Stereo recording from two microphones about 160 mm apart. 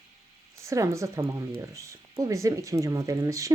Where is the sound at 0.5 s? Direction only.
20° right (ahead or behind).